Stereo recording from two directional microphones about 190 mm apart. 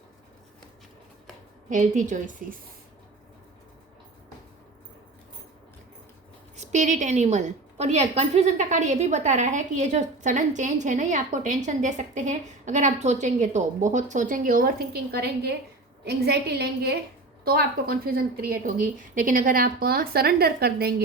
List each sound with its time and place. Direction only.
1.7 s a woman's voice: 40° right (ahead or behind)
6.6 s a woman's voice: 40° right (ahead or behind); by 20.9 s 55° right (ahead or behind)